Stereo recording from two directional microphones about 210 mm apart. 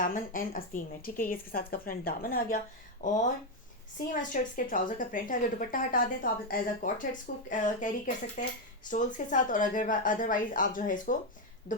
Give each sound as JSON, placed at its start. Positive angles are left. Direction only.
{"t": 0.0, "sound": "a woman's voice", "side_deg": 40}